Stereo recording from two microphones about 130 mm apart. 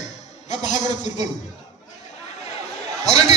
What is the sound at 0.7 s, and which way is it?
Speech, 65° left (ahead or behind).